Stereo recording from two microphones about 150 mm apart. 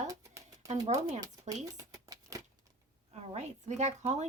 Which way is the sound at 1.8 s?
20° right (ahead or behind).